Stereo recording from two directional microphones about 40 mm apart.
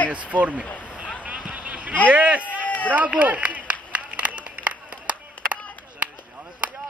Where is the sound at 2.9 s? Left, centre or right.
Right.